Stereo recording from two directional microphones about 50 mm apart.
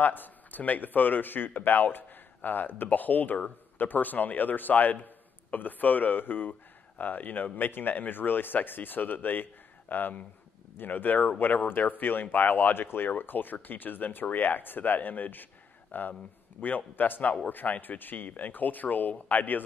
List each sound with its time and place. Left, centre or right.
0.0 s speech: left